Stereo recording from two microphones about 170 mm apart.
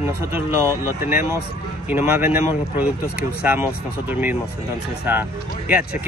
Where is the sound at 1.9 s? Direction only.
10° right (ahead or behind).